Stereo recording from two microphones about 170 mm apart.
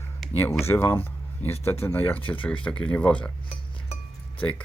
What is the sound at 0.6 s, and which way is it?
Speech, 15° left (ahead or behind).